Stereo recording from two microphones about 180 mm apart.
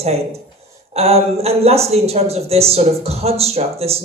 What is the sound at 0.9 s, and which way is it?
Speech, 35° right (ahead or behind).